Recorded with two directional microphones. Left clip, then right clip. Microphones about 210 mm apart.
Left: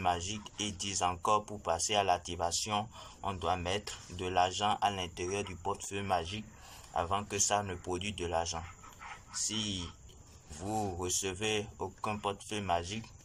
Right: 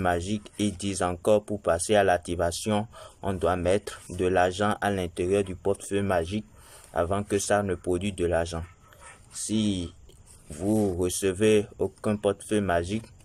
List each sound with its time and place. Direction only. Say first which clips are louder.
0.0 s speech: right 6 dB; 55° right (ahead or behind)